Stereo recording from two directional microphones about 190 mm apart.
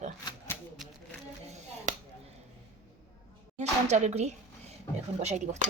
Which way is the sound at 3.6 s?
35° right (ahead or behind).